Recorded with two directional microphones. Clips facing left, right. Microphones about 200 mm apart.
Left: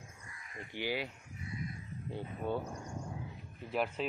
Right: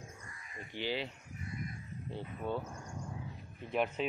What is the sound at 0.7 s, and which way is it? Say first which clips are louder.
Speech: even; 10° left (ahead or behind).